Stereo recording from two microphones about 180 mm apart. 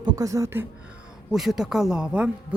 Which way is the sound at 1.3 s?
Centre (ahead or behind).